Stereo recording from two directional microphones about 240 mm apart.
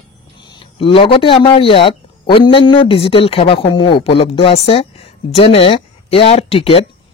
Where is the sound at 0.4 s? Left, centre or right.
Centre.